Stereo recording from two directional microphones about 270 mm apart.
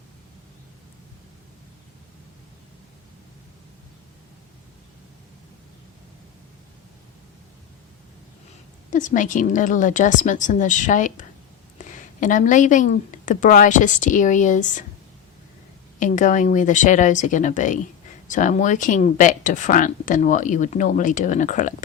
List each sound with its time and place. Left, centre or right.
8.9 s speech: left
16.0 s speech: left